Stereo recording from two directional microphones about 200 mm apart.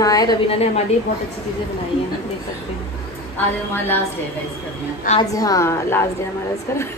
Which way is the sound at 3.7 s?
10° left (ahead or behind).